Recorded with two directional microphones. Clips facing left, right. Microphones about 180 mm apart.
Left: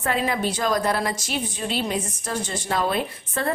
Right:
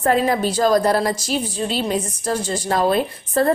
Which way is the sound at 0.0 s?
40° right (ahead or behind).